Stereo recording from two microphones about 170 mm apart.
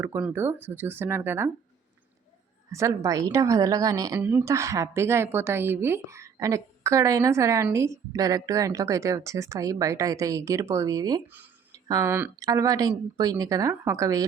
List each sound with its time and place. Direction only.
0.0 s a woman's voice: 10° right (ahead or behind)
2.7 s a woman's voice: 20° right (ahead or behind)